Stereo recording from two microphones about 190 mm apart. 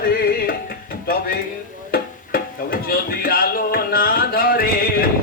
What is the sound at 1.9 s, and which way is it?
Music, 50° left (ahead or behind).